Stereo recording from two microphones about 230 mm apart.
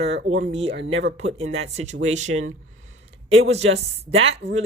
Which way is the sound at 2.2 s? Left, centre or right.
Right.